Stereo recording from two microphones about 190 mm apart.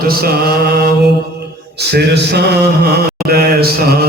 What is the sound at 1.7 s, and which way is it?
Speech, 60° right (ahead or behind).